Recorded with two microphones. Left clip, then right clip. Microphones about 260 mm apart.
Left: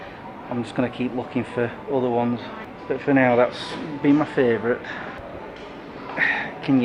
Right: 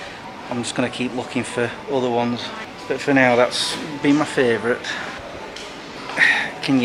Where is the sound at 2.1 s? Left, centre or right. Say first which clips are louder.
Right 2 dB; centre.